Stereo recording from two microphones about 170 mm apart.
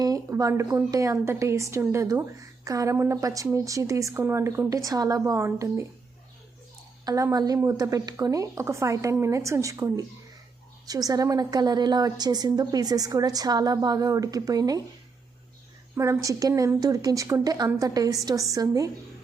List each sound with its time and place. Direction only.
0.0 s speech: 20° right (ahead or behind)
7.0 s a woman's voice: 20° right (ahead or behind)
16.0 s a woman's voice: 15° right (ahead or behind)